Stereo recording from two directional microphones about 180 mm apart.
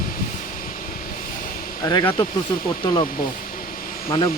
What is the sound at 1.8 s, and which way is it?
Speech, 20° left (ahead or behind).